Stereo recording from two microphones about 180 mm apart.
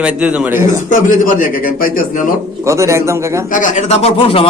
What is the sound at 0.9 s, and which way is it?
A man's voice, 45° left (ahead or behind).